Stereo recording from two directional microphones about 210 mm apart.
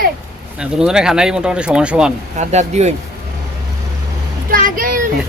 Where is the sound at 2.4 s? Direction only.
35° right (ahead or behind).